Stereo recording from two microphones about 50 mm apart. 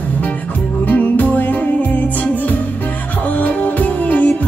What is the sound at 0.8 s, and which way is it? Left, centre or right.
Music, left.